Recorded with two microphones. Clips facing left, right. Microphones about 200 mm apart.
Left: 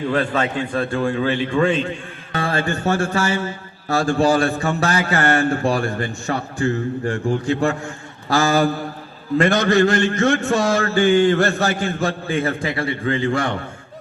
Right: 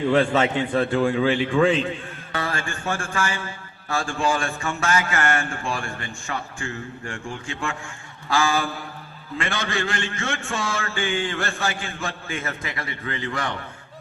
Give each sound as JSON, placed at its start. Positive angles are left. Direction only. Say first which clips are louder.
{"t": 0.1, "sound": "a man's voice", "louder": "right 2 dB", "side_deg": -25}
{"t": 2.3, "sound": "mantra", "louder": "left 7 dB", "side_deg": 30}